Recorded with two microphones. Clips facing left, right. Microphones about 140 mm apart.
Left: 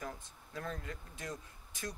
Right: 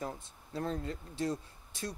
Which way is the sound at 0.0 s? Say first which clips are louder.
Right 4 dB; 30° right (ahead or behind).